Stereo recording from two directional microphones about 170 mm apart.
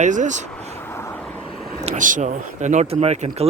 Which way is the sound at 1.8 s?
45° right (ahead or behind).